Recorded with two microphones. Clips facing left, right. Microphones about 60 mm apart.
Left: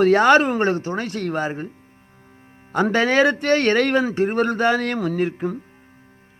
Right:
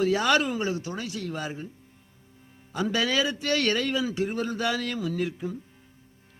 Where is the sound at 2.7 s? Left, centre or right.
Left.